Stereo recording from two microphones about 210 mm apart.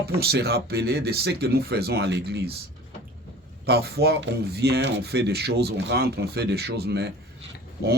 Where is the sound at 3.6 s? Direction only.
50° right (ahead or behind).